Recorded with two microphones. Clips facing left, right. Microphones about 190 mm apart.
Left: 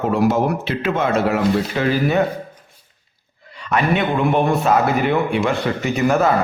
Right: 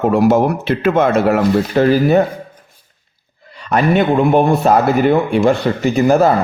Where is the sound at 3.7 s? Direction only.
40° right (ahead or behind).